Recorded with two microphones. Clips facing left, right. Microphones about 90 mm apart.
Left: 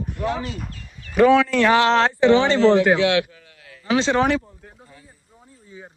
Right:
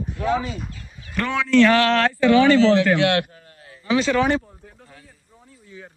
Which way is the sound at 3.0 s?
50° right (ahead or behind).